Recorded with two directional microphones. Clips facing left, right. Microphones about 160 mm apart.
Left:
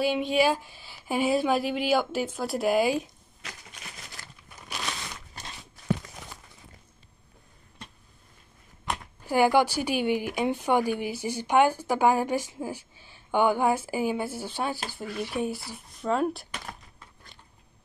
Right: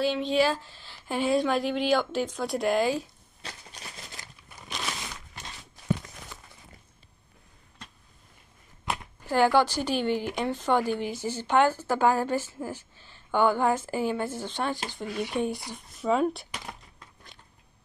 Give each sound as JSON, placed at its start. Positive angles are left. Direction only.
{"t": 0.0, "sound": "speech", "side_deg": 10}
{"t": 3.4, "sound": "a sound", "side_deg": -30}
{"t": 4.2, "sound": "crumpling", "side_deg": -20}
{"t": 9.2, "sound": "speech", "side_deg": 10}